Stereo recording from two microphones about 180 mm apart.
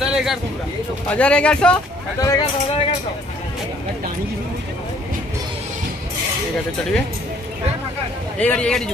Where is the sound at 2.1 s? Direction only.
20° left (ahead or behind).